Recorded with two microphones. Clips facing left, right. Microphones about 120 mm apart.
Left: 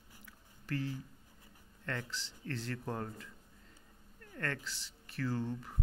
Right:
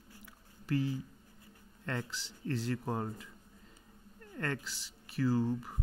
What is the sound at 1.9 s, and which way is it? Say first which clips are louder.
Speech: right 2 dB; 15° right (ahead or behind).